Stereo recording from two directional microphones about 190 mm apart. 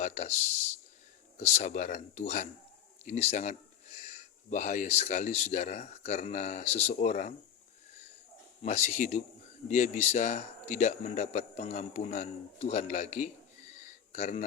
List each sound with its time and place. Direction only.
0.0 s speech: 40° left (ahead or behind)
1.4 s a man's voice: 35° left (ahead or behind)
8.6 s a man's voice: 40° left (ahead or behind)
13.8 s a sound: 40° left (ahead or behind)